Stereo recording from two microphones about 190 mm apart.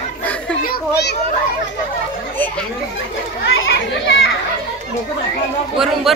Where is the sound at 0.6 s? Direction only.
55° left (ahead or behind).